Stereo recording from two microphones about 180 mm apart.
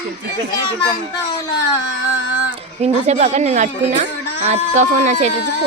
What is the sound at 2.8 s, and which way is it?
Speech, 35° right (ahead or behind).